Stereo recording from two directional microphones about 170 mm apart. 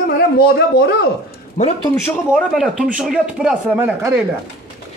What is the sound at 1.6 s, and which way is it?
Speech, 45° left (ahead or behind).